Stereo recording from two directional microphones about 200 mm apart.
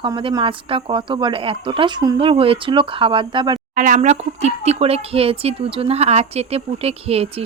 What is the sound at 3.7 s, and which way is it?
Speech, 40° right (ahead or behind).